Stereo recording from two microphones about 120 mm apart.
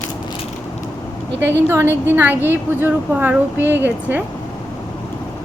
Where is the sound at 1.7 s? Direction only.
20° right (ahead or behind).